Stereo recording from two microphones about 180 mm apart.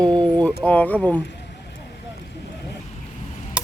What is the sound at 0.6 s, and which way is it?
Speech, 10° left (ahead or behind).